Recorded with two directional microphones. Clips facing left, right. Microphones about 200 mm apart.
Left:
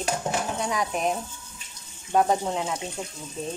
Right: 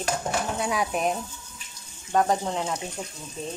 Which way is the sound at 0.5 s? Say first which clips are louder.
Right 1 dB; 5° right (ahead or behind).